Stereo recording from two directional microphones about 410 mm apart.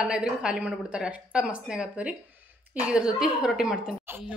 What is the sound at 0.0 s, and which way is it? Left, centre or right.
A woman's voice, centre.